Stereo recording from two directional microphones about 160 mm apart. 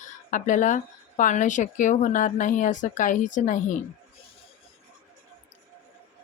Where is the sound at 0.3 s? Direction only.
50° left (ahead or behind).